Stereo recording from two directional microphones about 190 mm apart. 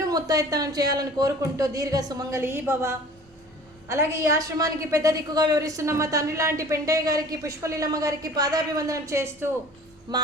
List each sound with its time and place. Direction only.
0.1 s a woman's voice: 20° right (ahead or behind)